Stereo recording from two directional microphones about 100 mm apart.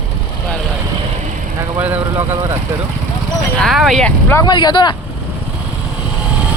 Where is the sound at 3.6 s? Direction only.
Centre (ahead or behind).